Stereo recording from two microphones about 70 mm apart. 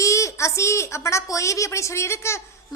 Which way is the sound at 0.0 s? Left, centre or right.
Left.